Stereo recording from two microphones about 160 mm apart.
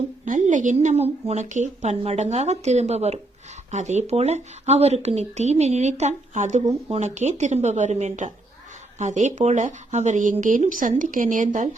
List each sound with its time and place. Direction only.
0.3 s a woman's voice: 50° right (ahead or behind)